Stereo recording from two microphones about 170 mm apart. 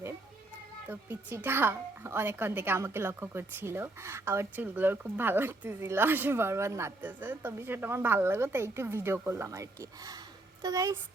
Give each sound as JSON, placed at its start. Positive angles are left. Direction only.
{"t": 0.9, "sound": "a woman's voice", "side_deg": -10}